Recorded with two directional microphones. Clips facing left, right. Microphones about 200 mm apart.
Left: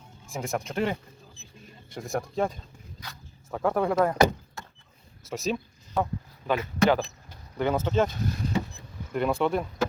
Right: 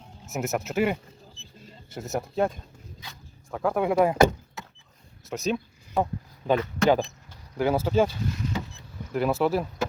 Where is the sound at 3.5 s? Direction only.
Centre (ahead or behind).